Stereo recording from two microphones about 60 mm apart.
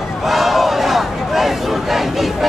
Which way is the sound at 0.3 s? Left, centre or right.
Centre.